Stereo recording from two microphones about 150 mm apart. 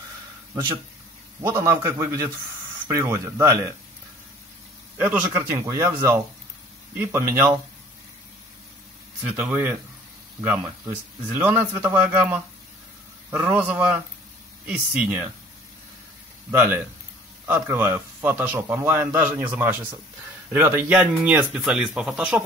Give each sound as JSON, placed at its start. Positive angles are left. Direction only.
{"t": 1.4, "sound": "a man's voice", "side_deg": -15}
{"t": 5.0, "sound": "a man's voice", "side_deg": -15}
{"t": 9.2, "sound": "a man's voice", "side_deg": -10}
{"t": 17.5, "sound": "a man's voice", "side_deg": -10}